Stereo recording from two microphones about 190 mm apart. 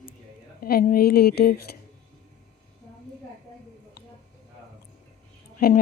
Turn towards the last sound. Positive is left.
turn(degrees=55)  # may be behind; listen again after turning